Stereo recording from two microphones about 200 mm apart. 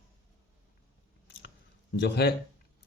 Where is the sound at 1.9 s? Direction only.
55° left (ahead or behind).